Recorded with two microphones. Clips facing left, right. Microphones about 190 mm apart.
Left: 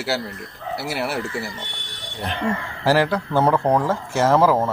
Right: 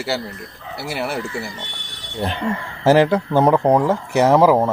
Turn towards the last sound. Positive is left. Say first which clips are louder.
# right 3 dB
turn(degrees=-15)  # may be behind; listen again after turning